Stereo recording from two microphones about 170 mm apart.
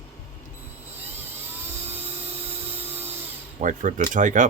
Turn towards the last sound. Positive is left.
turn(degrees=-50)  # may be behind; listen again after turning